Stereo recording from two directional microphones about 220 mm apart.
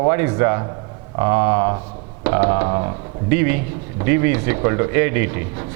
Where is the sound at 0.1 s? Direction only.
15° right (ahead or behind).